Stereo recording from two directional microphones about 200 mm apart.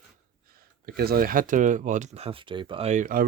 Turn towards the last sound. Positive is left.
turn(degrees=-40)  # may be behind; listen again after turning